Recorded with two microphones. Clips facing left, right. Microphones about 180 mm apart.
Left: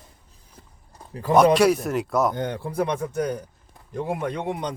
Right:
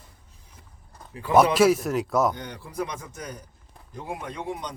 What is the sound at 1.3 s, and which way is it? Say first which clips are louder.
Speech: left 2 dB; centre (ahead or behind).